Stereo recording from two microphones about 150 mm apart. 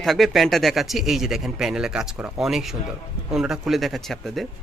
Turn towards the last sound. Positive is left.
turn(degrees=0)  # may be behind; listen again after turning